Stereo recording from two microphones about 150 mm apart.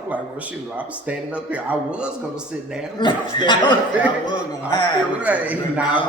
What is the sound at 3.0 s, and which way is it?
A man's voice, 30° left (ahead or behind).